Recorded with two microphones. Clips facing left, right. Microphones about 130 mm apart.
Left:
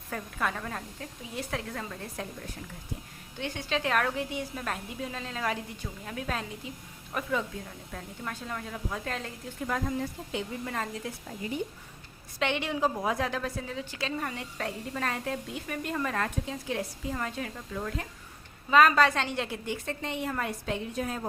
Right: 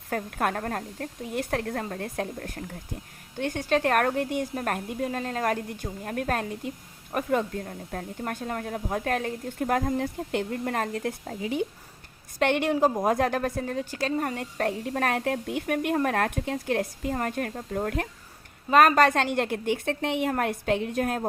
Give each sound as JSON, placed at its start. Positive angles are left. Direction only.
{"t": 0.1, "sound": "a woman's voice", "side_deg": -55}
{"t": 3.3, "sound": "a woman's voice", "side_deg": -45}
{"t": 12.4, "sound": "a woman's voice", "side_deg": -55}
{"t": 18.7, "sound": "a woman's voice", "side_deg": -50}